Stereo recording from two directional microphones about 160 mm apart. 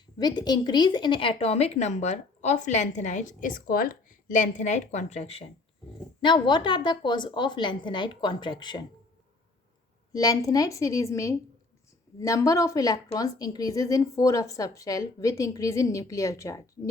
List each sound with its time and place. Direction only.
0.2 s a woman's voice: 25° left (ahead or behind)
6.2 s a woman's voice: 30° left (ahead or behind)
10.1 s a woman's voice: 20° left (ahead or behind)